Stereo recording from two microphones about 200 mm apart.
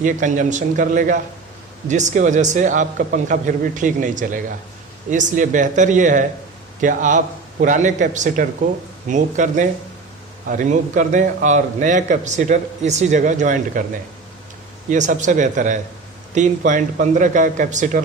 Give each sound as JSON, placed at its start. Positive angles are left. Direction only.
{"t": 0.0, "sound": "a man's voice", "side_deg": -40}
{"t": 14.8, "sound": "a man's voice", "side_deg": -40}